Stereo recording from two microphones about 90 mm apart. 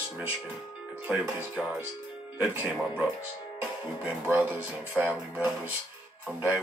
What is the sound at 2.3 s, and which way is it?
Speech, 20° right (ahead or behind).